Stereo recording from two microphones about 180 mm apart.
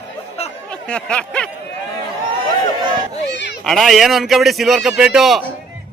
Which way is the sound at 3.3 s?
75° left (ahead or behind).